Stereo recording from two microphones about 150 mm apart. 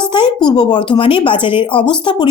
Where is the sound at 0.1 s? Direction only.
30° left (ahead or behind).